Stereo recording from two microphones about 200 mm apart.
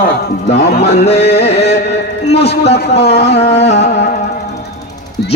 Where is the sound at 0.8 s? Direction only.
55° left (ahead or behind).